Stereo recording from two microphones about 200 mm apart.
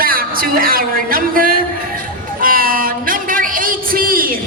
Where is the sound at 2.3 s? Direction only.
45° right (ahead or behind).